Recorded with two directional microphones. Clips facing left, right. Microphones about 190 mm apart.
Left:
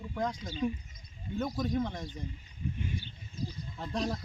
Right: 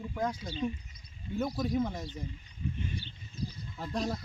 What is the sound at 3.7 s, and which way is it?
Speech, 5° right (ahead or behind).